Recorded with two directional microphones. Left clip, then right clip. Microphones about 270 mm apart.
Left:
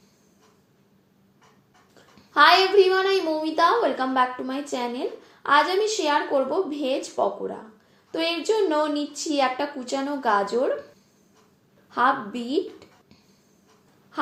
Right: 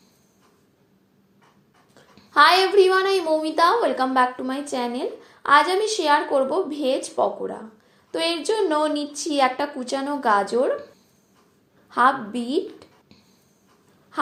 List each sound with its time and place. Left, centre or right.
2.0 s a woman's voice: right
11.9 s a woman's voice: right
14.1 s a sound: right